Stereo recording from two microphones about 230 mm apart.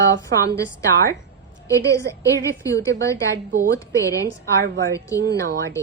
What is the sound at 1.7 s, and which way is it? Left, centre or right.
A woman's voice, centre.